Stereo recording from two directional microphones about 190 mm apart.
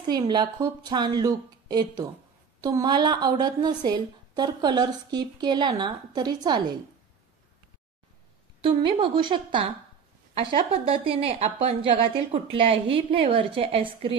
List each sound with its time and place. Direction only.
0.0 s a woman's voice: 20° right (ahead or behind)
8.6 s a woman's voice: 25° right (ahead or behind)